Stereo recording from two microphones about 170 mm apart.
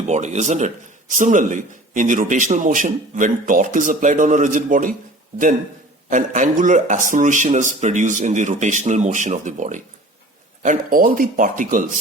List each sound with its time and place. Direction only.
0.1 s a man's voice: 45° right (ahead or behind)
6.1 s a man's voice: 50° right (ahead or behind)